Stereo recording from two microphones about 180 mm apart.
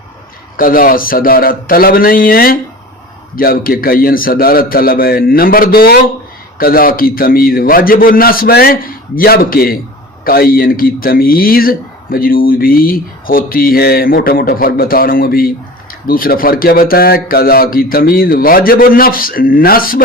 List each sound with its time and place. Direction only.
0.5 s a man's voice: 50° left (ahead or behind)